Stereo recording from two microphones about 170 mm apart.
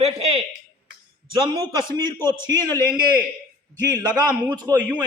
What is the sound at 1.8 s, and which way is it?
Speech, 25° right (ahead or behind).